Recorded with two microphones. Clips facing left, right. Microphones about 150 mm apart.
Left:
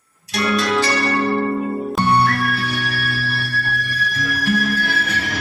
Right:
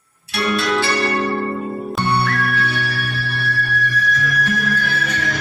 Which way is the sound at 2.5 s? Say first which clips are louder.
Right 1 dB; 35° left (ahead or behind).